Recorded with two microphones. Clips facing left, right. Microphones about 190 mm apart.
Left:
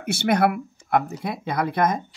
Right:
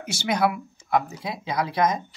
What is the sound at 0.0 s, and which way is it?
Speech, 60° left (ahead or behind).